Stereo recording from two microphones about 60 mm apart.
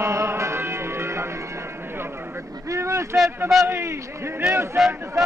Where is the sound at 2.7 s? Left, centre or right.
Right.